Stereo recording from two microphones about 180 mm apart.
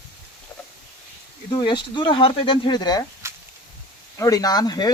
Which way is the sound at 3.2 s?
15° right (ahead or behind).